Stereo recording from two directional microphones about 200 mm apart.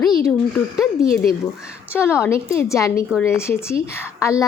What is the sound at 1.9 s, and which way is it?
A woman's voice, 10° left (ahead or behind).